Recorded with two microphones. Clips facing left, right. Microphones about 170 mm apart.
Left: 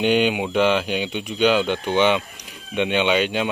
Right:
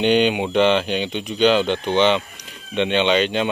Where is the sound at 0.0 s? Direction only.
5° left (ahead or behind).